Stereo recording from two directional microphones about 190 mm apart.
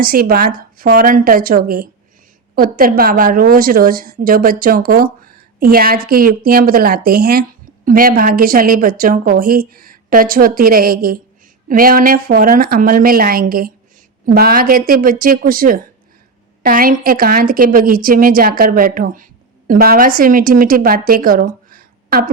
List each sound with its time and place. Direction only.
0.0 s a woman's voice: 50° right (ahead or behind)